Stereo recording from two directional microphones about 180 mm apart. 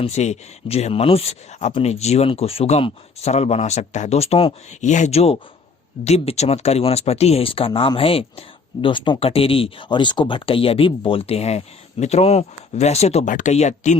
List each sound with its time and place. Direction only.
0.0 s speech: 40° left (ahead or behind)